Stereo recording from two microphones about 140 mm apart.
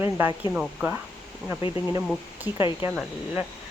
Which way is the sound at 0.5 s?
10° right (ahead or behind).